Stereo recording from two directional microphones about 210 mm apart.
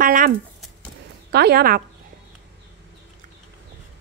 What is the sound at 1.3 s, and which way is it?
Speech, 50° right (ahead or behind).